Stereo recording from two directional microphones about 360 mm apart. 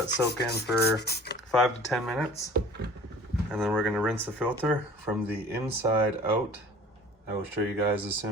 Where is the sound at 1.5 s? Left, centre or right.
Centre.